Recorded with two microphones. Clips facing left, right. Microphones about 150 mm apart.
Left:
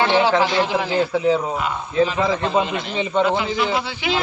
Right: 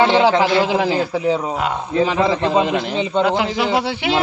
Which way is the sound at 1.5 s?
90° right.